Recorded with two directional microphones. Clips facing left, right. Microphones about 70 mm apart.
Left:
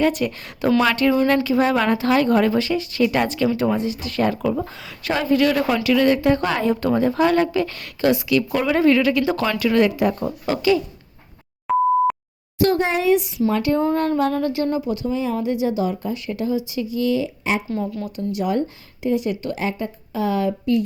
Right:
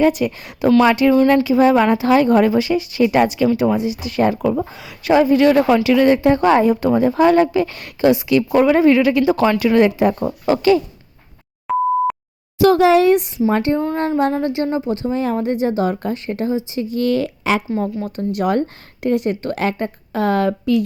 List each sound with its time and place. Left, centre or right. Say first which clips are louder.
0.1 s a woman's voice: right 3 dB; centre; by 6.7 s right
6.7 s a woman's voice: right 4 dB; centre; by 10.8 s right
11.7 s beep: even; centre
12.7 s speech: right 9 dB; right
13.1 s speech: right 3 dB; right
13.5 s a woman's voice: right 3 dB; right
13.7 s music: left 1 dB; centre
14.3 s a woman's voice: right 2 dB; right
16.9 s a woman's voice: right 3 dB; right
17.7 s speech: right 4 dB; right
19.5 s a woman's voice: right 4 dB; right